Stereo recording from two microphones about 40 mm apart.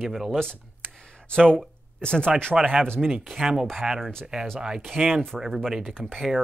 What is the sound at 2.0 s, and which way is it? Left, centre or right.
Speech, left.